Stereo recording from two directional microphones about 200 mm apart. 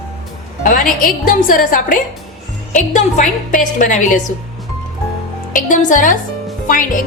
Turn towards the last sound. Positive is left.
turn(degrees=40)  # may be behind; listen again after turning